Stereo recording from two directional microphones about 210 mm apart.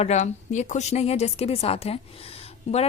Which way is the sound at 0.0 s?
35° left (ahead or behind).